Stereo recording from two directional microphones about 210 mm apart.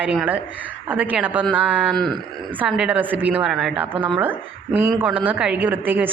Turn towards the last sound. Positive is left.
turn(degrees=-10)  # may be behind; listen again after turning